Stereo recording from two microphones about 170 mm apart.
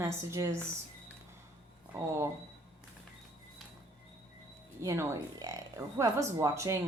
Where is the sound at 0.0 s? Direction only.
15° right (ahead or behind).